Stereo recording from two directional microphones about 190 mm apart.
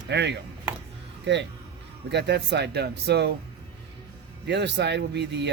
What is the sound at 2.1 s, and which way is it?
Speech, 60° right (ahead or behind).